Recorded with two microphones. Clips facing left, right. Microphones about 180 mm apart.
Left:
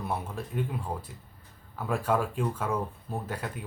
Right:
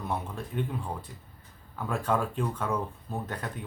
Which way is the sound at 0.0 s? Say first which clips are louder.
Even; 10° left (ahead or behind).